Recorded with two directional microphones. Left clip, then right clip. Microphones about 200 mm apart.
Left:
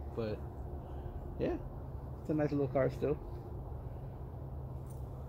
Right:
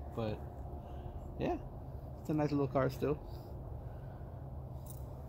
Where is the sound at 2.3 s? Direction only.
60° right (ahead or behind).